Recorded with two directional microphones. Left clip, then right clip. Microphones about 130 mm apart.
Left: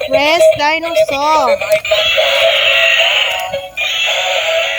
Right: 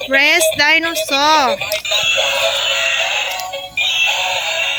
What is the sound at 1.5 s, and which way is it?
Synthetic singing, 20° left (ahead or behind).